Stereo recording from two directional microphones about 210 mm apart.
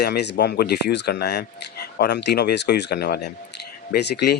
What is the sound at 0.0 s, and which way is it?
Speech, 50° left (ahead or behind).